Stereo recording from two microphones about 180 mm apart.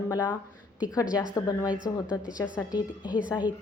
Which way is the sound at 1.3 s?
20° left (ahead or behind).